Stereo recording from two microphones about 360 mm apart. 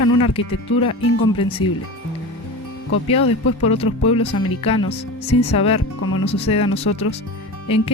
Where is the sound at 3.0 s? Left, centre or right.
Centre.